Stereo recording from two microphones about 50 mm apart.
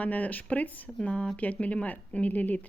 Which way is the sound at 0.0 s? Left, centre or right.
Left.